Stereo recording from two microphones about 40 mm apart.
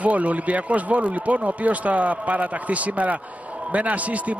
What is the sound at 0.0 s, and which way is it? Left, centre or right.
Speech, right.